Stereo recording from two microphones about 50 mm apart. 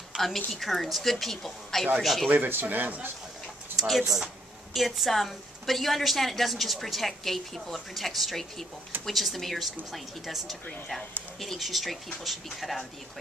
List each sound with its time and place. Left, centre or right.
0.1 s a woman's voice: centre
0.5 s a woman's voice: centre
2.3 s speech: right
3.7 s a woman's voice: centre